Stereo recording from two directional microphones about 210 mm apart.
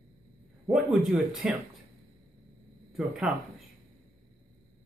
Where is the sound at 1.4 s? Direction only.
5° right (ahead or behind).